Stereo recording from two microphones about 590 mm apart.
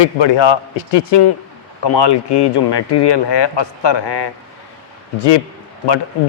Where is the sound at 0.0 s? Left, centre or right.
Left.